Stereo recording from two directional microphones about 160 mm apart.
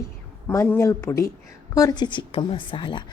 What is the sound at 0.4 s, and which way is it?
A woman's voice, 15° left (ahead or behind).